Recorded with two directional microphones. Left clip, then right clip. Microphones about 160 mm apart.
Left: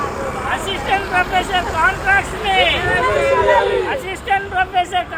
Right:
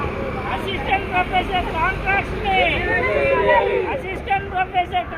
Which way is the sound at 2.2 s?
35° left (ahead or behind).